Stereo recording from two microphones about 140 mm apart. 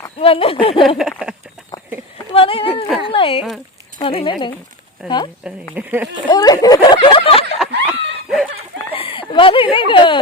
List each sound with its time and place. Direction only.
0.2 s speech: 40° left (ahead or behind)
0.9 s a sound: 5° right (ahead or behind)
1.7 s a sound: 25° left (ahead or behind)
2.1 s a sound: 40° left (ahead or behind)
3.9 s speech: 40° left (ahead or behind)
5.7 s speech: 10° right (ahead or behind)
6.2 s speech: 30° left (ahead or behind)
7.6 s snicker: centre (ahead or behind)
8.9 s speech: 40° left (ahead or behind)